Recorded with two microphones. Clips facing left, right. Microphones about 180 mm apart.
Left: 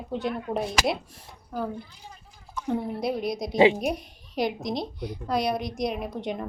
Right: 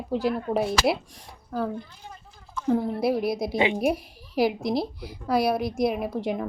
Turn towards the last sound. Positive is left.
turn(degrees=-5)  # may be behind; listen again after turning